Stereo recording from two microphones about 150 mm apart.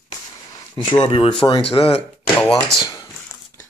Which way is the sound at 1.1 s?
40° left (ahead or behind).